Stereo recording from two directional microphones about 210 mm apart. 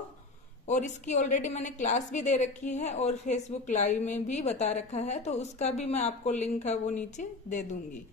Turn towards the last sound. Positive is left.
turn(degrees=35)  # may be behind; listen again after turning